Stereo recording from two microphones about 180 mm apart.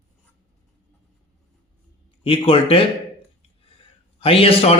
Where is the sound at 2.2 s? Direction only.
30° left (ahead or behind).